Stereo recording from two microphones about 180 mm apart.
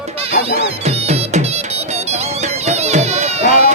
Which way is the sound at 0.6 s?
35° right (ahead or behind).